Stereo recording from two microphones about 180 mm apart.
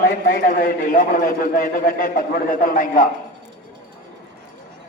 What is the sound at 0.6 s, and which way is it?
A man's voice, 50° left (ahead or behind).